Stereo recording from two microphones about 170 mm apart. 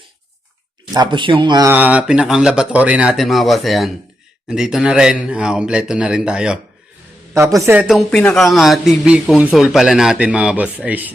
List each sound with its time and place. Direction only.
0.9 s speech: 30° right (ahead or behind)
1.6 s speech: 10° right (ahead or behind)
7.6 s speech: 10° right (ahead or behind)
8.1 s speech: 5° left (ahead or behind)